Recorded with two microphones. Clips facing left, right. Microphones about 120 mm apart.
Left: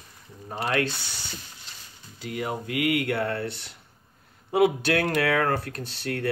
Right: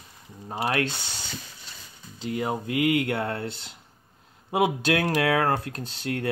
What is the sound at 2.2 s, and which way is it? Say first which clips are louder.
Speech: right 3 dB; 25° right (ahead or behind).